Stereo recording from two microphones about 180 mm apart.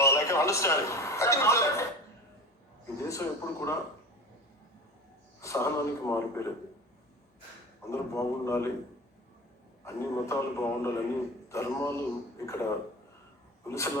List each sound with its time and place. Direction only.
0.0 s a man's voice: 15° left (ahead or behind)
3.0 s a man's voice: 15° left (ahead or behind)
5.4 s a man's voice: 15° left (ahead or behind)
7.9 s a man's voice: 15° left (ahead or behind)
9.8 s a man's voice: 15° left (ahead or behind)